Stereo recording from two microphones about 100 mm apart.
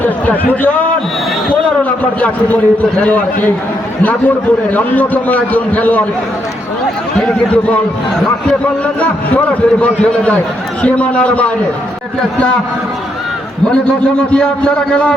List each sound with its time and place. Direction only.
0.0 s a man's voice: 15° left (ahead or behind)
4.7 s a man's voice: 15° left (ahead or behind)
7.2 s a man's voice: 10° left (ahead or behind)
9.0 s a man's voice: 15° left (ahead or behind)
13.7 s a man's voice: 10° left (ahead or behind)